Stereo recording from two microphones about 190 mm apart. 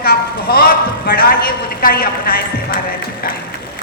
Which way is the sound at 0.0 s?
55° left (ahead or behind).